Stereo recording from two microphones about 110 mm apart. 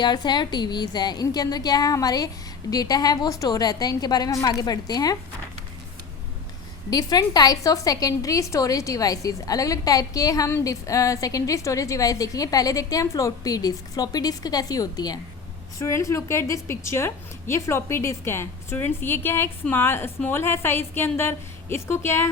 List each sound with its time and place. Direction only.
0.0 s a woman's voice: 40° left (ahead or behind)
6.9 s a woman's voice: 35° left (ahead or behind); by 22.3 s 20° left (ahead or behind)